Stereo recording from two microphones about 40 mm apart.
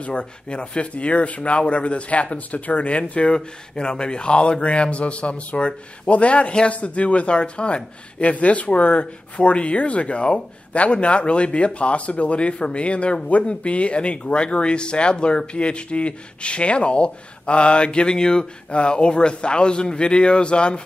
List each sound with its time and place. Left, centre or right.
0.0 s speech: left
3.3 s speech: centre